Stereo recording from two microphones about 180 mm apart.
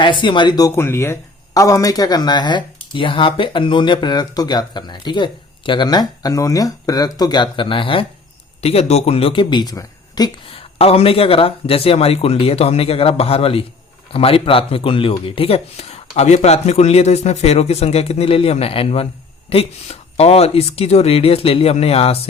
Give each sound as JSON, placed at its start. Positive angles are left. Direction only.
{"t": 0.0, "sound": "speech", "side_deg": 25}